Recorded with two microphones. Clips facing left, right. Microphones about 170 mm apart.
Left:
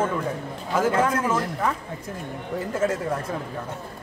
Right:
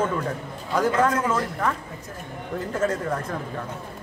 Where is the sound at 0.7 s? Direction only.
5° left (ahead or behind).